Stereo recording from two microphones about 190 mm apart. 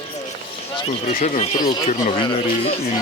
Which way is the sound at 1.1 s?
40° left (ahead or behind).